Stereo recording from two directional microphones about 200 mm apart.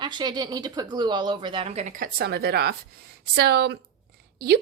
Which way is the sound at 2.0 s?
50° right (ahead or behind).